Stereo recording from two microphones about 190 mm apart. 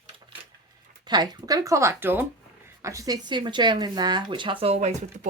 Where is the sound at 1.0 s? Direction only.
20° right (ahead or behind); by 5.3 s 35° right (ahead or behind).